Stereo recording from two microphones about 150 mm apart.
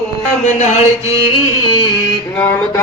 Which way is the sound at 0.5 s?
50° left (ahead or behind).